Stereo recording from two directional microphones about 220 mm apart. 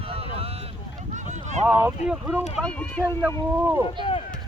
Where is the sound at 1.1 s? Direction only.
35° right (ahead or behind).